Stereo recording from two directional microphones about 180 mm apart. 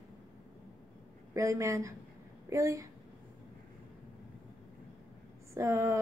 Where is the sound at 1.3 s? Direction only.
15° right (ahead or behind).